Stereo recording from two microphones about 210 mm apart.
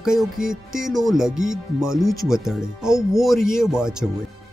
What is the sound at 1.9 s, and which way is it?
Speech, 15° left (ahead or behind).